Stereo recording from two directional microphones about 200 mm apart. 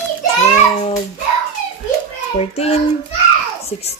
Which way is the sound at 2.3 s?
30° left (ahead or behind).